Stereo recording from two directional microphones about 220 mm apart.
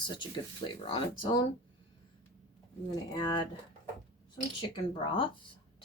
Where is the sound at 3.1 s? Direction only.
20° left (ahead or behind).